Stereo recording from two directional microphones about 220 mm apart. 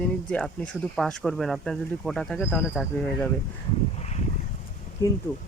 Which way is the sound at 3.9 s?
30° left (ahead or behind).